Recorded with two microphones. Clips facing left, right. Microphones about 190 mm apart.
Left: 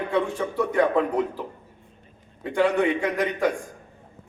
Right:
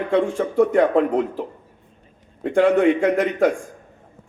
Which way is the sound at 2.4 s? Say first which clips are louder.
Right 6 dB; 50° right (ahead or behind).